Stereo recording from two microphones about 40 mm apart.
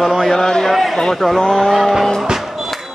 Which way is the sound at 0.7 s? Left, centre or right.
Centre.